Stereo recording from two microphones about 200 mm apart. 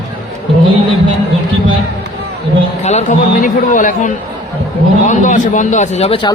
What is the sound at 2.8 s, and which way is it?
A man's voice, 40° left (ahead or behind).